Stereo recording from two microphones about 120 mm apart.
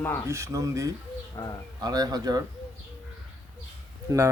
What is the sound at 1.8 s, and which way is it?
Speech, 35° right (ahead or behind).